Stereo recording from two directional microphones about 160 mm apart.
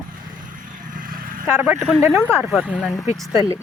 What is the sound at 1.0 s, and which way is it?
Vehicle, 60° right (ahead or behind).